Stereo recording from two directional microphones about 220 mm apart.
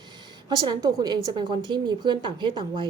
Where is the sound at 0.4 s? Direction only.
20° right (ahead or behind).